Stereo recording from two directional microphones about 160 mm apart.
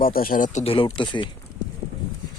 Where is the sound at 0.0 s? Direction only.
65° left (ahead or behind).